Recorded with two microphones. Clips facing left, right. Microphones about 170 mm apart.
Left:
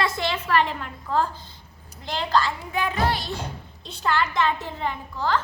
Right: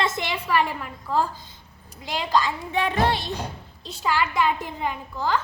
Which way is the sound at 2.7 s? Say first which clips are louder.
Right 5 dB; 30° right (ahead or behind).